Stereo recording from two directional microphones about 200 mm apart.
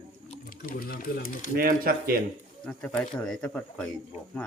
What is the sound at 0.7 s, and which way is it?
Speech, 45° left (ahead or behind).